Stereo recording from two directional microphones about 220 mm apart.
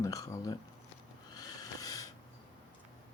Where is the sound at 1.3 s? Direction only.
15° left (ahead or behind).